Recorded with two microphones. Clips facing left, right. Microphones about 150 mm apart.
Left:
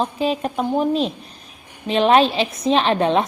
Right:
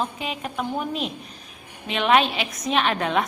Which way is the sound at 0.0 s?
35° left (ahead or behind).